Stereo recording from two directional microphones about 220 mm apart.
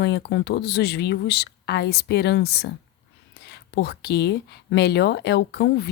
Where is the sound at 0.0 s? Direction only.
50° left (ahead or behind).